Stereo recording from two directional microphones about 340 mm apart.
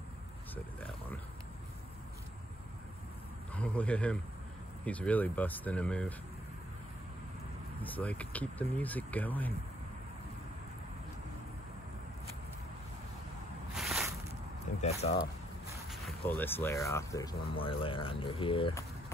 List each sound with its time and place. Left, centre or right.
0.7 s a sound: centre
3.5 s a man's voice: centre
7.8 s speech: centre
13.7 s a sound: centre
14.8 s speech: centre
15.9 s speech: centre